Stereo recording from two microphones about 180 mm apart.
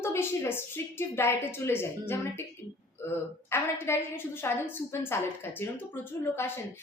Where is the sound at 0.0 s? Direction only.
15° left (ahead or behind).